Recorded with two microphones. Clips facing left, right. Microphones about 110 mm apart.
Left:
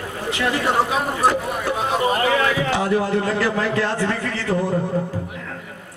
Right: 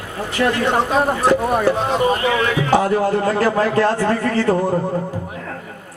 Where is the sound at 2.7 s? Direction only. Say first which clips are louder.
Right 4 dB; 45° right (ahead or behind).